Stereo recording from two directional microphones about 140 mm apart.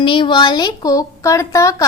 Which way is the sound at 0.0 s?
35° left (ahead or behind).